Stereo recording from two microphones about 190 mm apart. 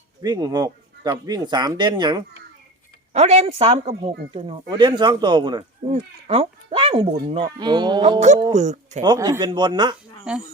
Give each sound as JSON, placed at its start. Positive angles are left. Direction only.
{"t": 0.2, "sound": "speech", "side_deg": -20}
{"t": 3.1, "sound": "speech", "side_deg": -35}
{"t": 8.5, "sound": "speech", "side_deg": -40}
{"t": 9.0, "sound": "speech", "side_deg": -20}
{"t": 10.3, "sound": "speech", "side_deg": -5}